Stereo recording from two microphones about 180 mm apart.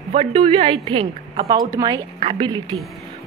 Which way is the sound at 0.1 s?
35° right (ahead or behind).